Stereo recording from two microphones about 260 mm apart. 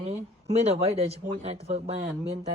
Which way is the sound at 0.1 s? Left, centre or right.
Right.